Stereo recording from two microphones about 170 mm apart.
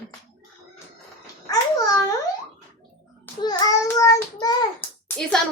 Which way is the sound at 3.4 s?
25° left (ahead or behind).